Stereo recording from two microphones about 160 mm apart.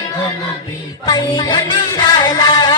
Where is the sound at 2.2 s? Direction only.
25° left (ahead or behind).